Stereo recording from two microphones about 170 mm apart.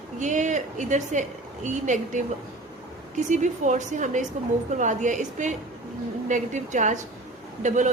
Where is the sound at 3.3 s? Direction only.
45° right (ahead or behind).